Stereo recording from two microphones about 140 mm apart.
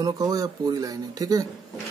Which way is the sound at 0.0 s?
25° right (ahead or behind).